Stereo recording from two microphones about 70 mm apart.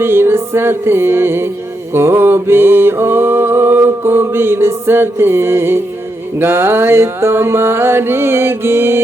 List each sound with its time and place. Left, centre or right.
0.0 s music: right